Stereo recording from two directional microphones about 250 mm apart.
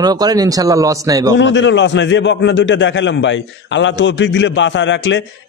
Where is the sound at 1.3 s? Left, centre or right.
Left.